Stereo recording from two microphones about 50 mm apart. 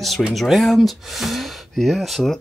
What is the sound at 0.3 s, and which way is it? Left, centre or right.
Speech, centre.